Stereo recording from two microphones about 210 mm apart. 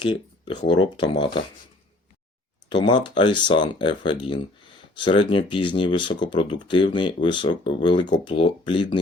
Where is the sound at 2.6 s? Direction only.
20° left (ahead or behind).